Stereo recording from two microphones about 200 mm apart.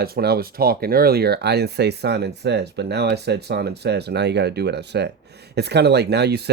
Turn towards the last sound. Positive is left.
turn(degrees=-55)  # may be behind; listen again after turning